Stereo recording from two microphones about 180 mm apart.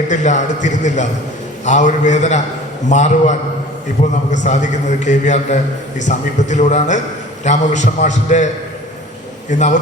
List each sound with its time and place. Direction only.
0.1 s a man's voice: 40° left (ahead or behind)
9.5 s a man's voice: 40° left (ahead or behind)